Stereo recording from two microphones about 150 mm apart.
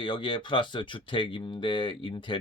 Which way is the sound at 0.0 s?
35° left (ahead or behind).